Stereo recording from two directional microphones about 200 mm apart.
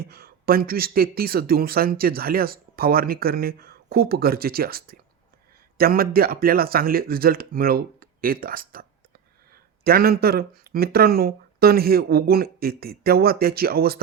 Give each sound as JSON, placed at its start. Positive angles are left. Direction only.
{"t": 0.0, "sound": "speech", "side_deg": -50}